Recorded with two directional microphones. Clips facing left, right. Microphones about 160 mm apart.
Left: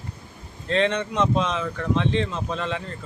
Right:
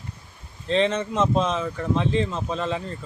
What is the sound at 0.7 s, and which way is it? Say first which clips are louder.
Speech: right 1 dB; centre (ahead or behind).